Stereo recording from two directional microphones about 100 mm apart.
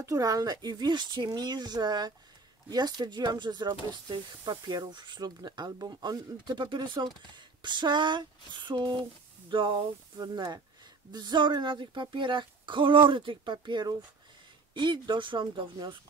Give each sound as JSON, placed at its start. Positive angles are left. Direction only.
{"t": 0.0, "sound": "speech", "side_deg": -35}